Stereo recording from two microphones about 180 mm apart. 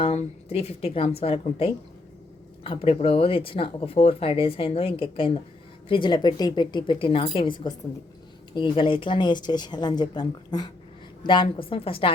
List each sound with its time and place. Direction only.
0.0 s a woman's voice: 35° left (ahead or behind)